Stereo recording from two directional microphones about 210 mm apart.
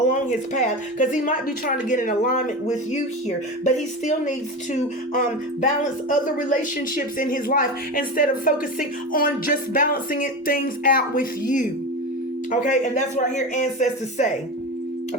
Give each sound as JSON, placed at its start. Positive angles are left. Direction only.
{"t": 0.1, "sound": "speech", "side_deg": 35}